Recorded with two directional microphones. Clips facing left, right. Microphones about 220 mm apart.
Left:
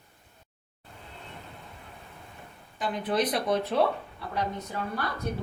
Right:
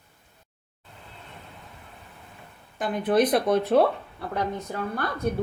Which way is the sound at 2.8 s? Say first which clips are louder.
Right 6 dB; 50° right (ahead or behind).